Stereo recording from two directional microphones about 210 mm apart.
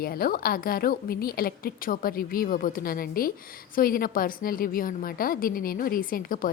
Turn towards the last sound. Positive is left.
turn(degrees=40)  # may be behind; listen again after turning